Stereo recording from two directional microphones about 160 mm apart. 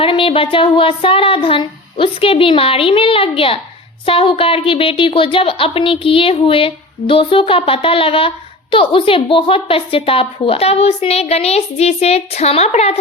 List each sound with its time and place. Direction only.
0.0 s a woman's voice: 35° left (ahead or behind)